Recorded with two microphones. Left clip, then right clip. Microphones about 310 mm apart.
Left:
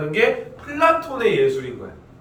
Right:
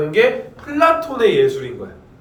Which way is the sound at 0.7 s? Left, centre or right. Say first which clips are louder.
Right 3 dB; right.